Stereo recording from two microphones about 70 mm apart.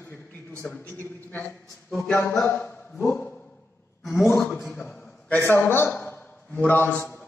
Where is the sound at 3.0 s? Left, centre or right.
Left.